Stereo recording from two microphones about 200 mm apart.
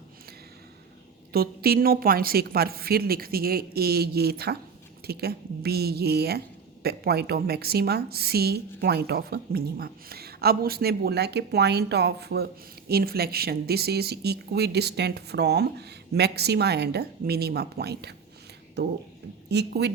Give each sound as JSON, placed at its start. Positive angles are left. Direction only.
{"t": 1.3, "sound": "a woman's voice", "side_deg": -50}